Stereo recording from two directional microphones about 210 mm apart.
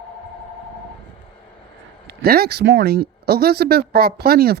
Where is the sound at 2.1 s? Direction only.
45° right (ahead or behind).